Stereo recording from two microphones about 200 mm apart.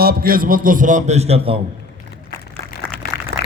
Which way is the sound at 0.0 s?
50° right (ahead or behind).